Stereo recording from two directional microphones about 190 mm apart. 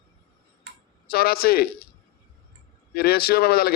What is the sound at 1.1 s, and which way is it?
Speech, 55° left (ahead or behind).